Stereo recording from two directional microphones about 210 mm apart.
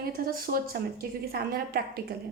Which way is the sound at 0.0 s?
45° right (ahead or behind).